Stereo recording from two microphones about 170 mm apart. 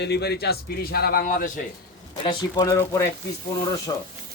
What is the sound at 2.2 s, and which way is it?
Speech, 30° left (ahead or behind).